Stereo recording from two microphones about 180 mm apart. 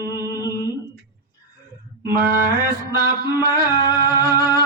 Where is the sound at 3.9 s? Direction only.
20° left (ahead or behind).